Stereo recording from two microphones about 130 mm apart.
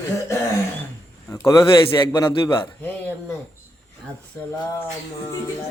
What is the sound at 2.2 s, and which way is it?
Speech, 20° left (ahead or behind).